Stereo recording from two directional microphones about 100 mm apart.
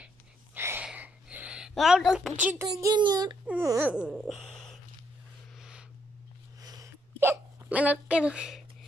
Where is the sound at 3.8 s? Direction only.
10° right (ahead or behind).